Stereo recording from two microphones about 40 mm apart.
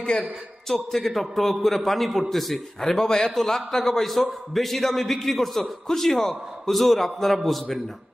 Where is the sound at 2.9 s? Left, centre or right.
Centre.